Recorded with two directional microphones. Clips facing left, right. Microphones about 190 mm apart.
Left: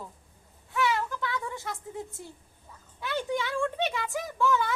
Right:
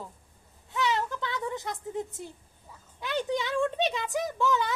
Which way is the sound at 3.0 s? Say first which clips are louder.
Right 1 dB; 20° right (ahead or behind).